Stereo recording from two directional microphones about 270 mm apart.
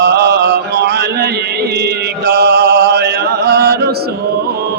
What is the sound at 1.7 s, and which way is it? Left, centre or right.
Chant, right.